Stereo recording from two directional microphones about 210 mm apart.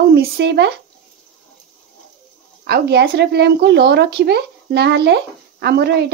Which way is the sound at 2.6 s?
50° right (ahead or behind).